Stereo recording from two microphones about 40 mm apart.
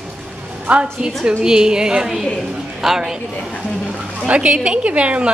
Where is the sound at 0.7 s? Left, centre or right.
Right.